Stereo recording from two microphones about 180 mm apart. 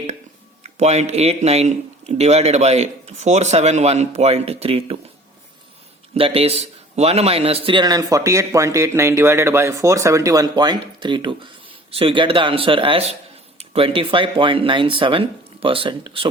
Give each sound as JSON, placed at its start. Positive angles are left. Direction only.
{"t": 0.8, "sound": "a man's voice", "side_deg": -40}
{"t": 6.1, "sound": "a man's voice", "side_deg": -30}